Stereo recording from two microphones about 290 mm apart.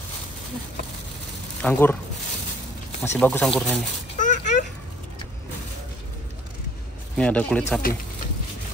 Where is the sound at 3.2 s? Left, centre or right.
Centre.